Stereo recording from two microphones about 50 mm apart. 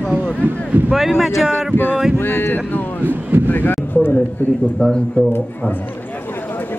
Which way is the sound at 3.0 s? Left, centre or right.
Right.